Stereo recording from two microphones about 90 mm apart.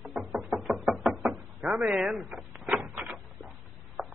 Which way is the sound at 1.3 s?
15° right (ahead or behind).